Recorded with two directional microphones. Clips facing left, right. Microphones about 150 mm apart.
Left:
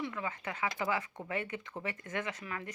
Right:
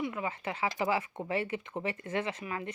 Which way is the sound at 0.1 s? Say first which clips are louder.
Right 3 dB; 25° right (ahead or behind).